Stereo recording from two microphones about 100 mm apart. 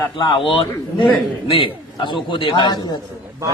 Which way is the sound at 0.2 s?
60° left (ahead or behind).